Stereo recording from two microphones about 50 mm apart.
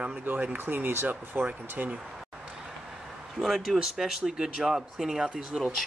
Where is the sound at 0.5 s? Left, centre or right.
Right.